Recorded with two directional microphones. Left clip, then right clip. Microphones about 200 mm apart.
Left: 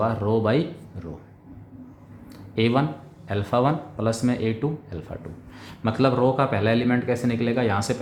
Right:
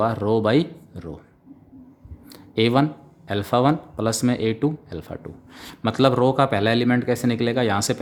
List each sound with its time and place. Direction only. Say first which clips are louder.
0.0 s speech: right 2 dB; 45° right (ahead or behind)
2.3 s a sound: right 3 dB; 40° right (ahead or behind)
3.2 s speech: right 3 dB; 45° right (ahead or behind)